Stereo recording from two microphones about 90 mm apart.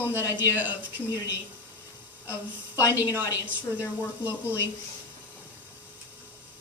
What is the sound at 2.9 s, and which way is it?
Speech, 25° right (ahead or behind).